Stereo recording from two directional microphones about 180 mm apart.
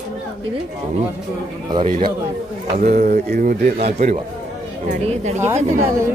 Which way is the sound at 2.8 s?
40° right (ahead or behind).